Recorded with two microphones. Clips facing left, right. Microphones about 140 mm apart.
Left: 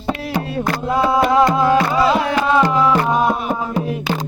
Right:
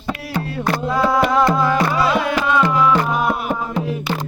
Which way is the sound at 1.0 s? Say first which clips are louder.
Left 2 dB; 15° left (ahead or behind).